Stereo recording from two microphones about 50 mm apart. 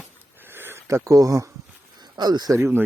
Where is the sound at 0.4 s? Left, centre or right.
Right.